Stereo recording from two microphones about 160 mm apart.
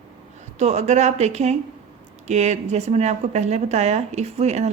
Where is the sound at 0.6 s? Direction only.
45° right (ahead or behind).